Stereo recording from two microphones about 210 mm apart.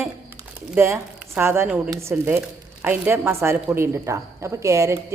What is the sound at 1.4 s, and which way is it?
Speech, 10° right (ahead or behind).